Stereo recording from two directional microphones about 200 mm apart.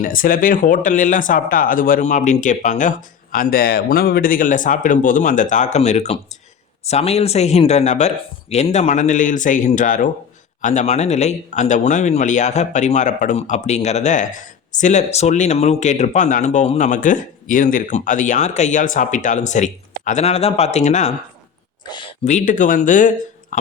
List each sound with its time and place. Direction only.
0.0 s speech: 45° left (ahead or behind)
22.2 s speech: 35° left (ahead or behind)